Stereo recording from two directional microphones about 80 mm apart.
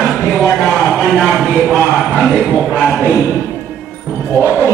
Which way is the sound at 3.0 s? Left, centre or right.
Centre.